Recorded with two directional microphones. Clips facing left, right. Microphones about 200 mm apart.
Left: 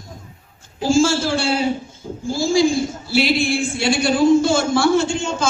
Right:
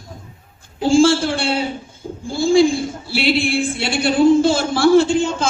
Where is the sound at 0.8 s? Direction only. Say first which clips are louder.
Right 3 dB; 30° right (ahead or behind).